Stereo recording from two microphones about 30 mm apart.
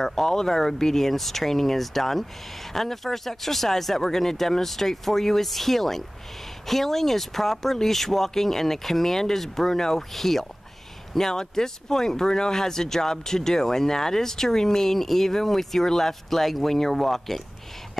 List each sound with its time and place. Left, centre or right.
0.0 s speech: centre